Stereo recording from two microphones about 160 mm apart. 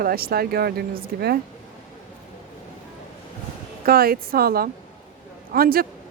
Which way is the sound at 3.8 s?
70° right (ahead or behind).